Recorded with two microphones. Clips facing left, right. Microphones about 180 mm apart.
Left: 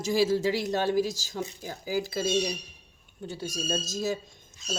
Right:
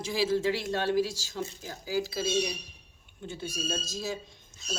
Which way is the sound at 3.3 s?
40° left (ahead or behind).